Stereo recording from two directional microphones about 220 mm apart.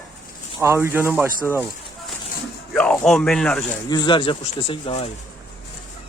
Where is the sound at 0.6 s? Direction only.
10° right (ahead or behind).